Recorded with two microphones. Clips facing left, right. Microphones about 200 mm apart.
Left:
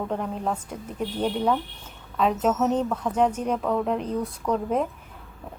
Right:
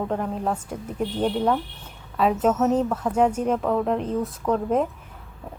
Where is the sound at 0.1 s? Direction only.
Centre (ahead or behind).